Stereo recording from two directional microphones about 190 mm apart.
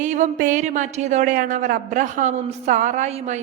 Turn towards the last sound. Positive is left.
turn(degrees=-35)  # may be behind; listen again after turning